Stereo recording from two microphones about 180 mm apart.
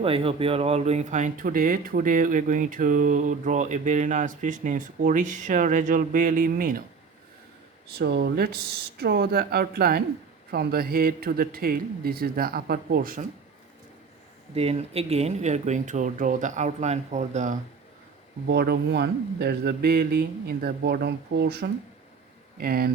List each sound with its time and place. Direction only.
0.0 s speech: 30° right (ahead or behind); by 6.8 s 50° right (ahead or behind)
7.9 s speech: 65° right (ahead or behind)
14.5 s speech: 35° right (ahead or behind)
18.4 s speech: 65° right (ahead or behind)